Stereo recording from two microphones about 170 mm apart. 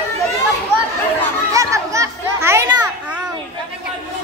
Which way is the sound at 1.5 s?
20° right (ahead or behind).